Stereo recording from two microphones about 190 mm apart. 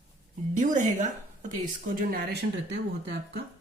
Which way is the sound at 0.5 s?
40° right (ahead or behind).